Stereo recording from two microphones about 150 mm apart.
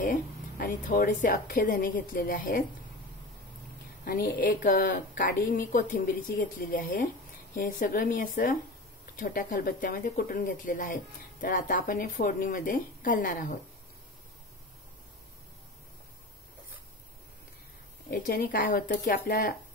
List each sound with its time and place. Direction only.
0.6 s a woman's voice: 65° left (ahead or behind)
4.0 s a woman's voice: 75° left (ahead or behind)
18.1 s a woman's voice: 65° left (ahead or behind); by 19.5 s 90° left